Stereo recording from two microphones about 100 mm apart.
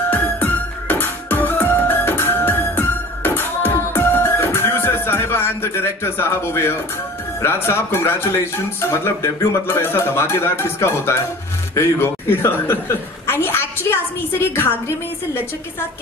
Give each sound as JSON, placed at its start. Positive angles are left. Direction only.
{"t": 0.1, "sound": "music", "side_deg": 20}
{"t": 7.4, "sound": "speech", "side_deg": 25}
{"t": 11.7, "sound": "a sound", "side_deg": 25}